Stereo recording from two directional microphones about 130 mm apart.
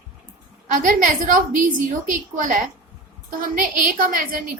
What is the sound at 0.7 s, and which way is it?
A woman's voice, 90° right.